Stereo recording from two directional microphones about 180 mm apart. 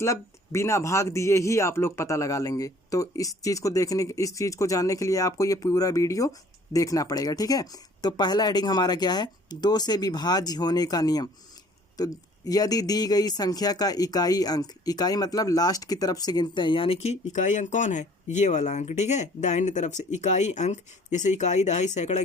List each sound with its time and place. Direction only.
0.0 s speech: 15° left (ahead or behind); by 22.2 s 40° left (ahead or behind)